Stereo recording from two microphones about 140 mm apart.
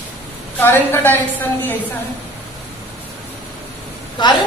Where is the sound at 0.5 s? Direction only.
15° left (ahead or behind).